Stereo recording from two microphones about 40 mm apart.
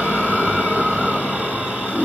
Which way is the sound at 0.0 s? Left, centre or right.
Right.